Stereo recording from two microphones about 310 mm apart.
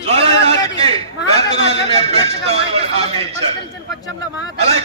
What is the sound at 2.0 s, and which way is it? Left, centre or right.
Speech, centre.